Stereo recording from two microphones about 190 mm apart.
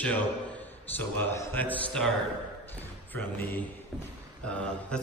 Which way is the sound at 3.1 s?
10° left (ahead or behind).